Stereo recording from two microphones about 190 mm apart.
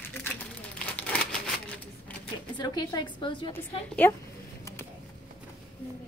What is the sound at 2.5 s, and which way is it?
A woman's voice, 20° left (ahead or behind).